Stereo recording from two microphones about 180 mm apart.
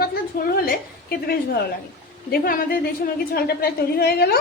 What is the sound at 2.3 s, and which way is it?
A woman's voice, 50° left (ahead or behind).